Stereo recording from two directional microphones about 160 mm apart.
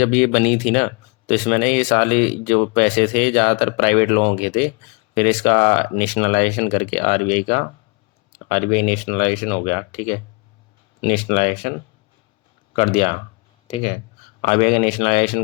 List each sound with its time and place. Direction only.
0.0 s speech: 45° left (ahead or behind)